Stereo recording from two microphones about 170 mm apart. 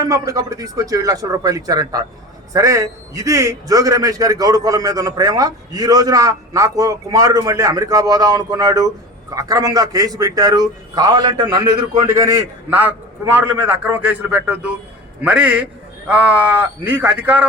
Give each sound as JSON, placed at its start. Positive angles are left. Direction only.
{"t": 0.0, "sound": "a man's voice", "side_deg": -20}